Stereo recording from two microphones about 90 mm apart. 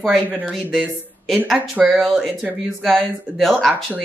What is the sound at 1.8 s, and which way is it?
Speech, centre (ahead or behind).